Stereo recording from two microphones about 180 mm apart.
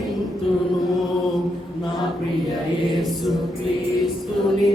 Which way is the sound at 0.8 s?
Centre (ahead or behind).